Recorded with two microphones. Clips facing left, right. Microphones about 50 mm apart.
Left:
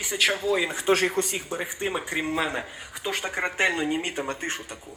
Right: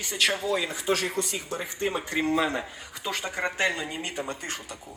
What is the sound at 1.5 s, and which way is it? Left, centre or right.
A man's voice, centre.